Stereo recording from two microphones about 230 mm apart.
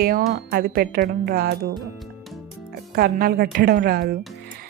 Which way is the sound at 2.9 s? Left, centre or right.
Right.